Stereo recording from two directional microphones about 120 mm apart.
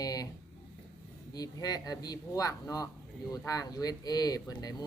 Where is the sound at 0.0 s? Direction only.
30° left (ahead or behind).